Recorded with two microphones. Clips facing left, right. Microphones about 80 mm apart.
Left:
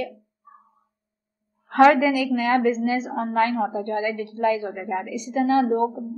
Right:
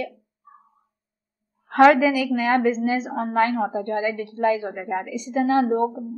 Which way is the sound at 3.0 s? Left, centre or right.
Centre.